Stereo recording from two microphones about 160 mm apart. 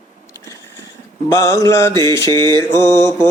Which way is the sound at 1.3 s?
20° left (ahead or behind).